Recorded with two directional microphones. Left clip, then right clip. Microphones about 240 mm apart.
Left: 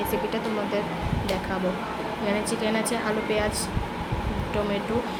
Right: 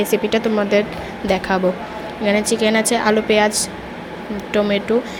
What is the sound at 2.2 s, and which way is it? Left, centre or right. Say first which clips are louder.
A woman's voice: right 11 dB; right.